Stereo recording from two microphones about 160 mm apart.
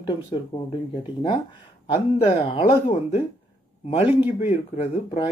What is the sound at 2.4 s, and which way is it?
Speech, 40° left (ahead or behind).